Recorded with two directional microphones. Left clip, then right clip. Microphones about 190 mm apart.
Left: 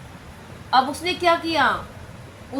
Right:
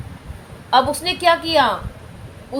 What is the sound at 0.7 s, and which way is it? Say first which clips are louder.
Speech: right 3 dB; 55° right (ahead or behind).